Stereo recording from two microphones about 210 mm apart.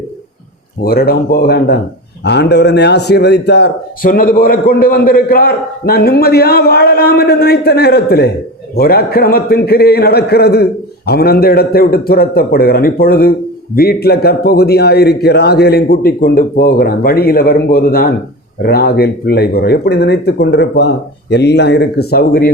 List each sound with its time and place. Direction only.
0.8 s a man's voice: 45° left (ahead or behind)